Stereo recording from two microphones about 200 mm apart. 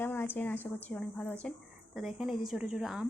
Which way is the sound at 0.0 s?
10° left (ahead or behind).